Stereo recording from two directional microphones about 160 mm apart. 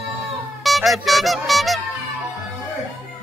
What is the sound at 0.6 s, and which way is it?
Speech, centre (ahead or behind).